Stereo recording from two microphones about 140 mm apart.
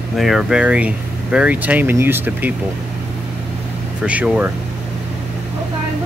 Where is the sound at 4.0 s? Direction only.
10° right (ahead or behind).